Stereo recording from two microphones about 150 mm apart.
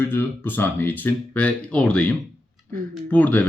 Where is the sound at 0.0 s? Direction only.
15° left (ahead or behind).